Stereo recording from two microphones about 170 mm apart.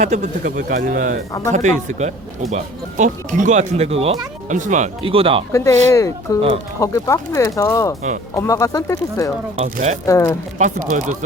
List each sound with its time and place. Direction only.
0.0 s speech: 45° right (ahead or behind)
4.4 s speech: 45° right (ahead or behind)
5.0 s speech: 35° right (ahead or behind)
5.5 s speech: 20° left (ahead or behind)
9.6 s speech: 50° right (ahead or behind)
10.1 s speech: 15° left (ahead or behind)
10.6 s speech: 50° right (ahead or behind)